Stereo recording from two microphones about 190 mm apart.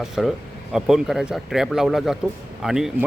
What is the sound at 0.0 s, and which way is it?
Speech, centre (ahead or behind).